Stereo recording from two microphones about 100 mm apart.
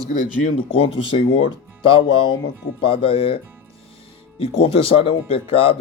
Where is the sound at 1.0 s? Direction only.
60° left (ahead or behind).